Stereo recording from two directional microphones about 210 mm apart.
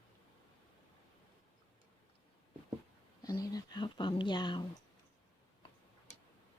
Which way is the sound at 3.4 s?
20° left (ahead or behind).